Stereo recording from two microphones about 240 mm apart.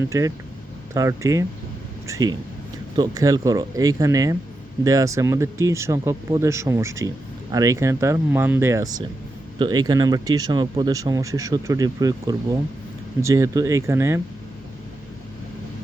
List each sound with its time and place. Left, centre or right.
0.0 s speech: centre